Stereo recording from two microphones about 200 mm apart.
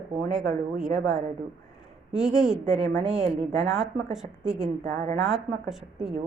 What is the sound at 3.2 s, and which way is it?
Speech, 30° right (ahead or behind).